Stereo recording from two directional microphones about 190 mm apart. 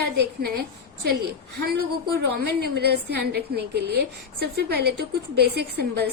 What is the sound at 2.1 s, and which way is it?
A woman's voice, 60° right (ahead or behind).